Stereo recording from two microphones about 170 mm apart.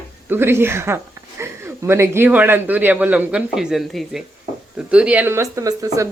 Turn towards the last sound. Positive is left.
turn(degrees=-20)  # may be behind; listen again after turning